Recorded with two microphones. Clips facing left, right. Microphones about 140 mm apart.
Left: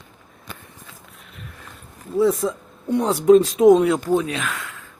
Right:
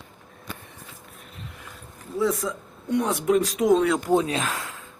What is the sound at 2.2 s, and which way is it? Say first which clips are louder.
Speech: left 6 dB; 25° left (ahead or behind).